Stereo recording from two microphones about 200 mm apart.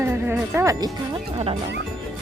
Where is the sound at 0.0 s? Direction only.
10° right (ahead or behind).